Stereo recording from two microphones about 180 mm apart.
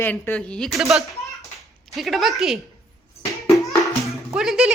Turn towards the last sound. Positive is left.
turn(degrees=-5)  # may be behind; listen again after turning